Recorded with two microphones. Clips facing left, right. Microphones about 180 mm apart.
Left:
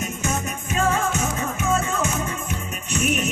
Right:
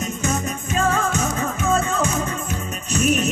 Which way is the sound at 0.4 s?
35° right (ahead or behind).